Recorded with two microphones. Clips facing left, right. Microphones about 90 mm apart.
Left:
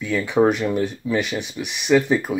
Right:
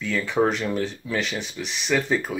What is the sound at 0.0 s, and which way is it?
Speech, 15° left (ahead or behind).